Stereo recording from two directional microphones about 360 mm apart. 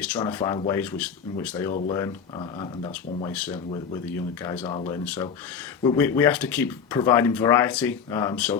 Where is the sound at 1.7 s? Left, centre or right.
Centre.